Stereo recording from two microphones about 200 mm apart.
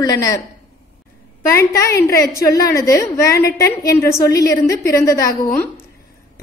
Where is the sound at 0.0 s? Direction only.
15° left (ahead or behind).